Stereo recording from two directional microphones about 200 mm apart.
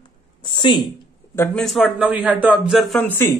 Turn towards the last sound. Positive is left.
turn(degrees=10)  # may be behind; listen again after turning